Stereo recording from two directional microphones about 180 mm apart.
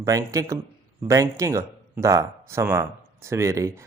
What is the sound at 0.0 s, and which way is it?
Speech, 15° right (ahead or behind).